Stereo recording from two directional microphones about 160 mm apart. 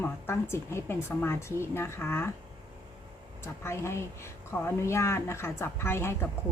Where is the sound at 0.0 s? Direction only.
15° left (ahead or behind).